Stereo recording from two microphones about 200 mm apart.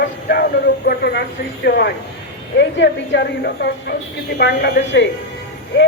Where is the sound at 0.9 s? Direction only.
50° left (ahead or behind).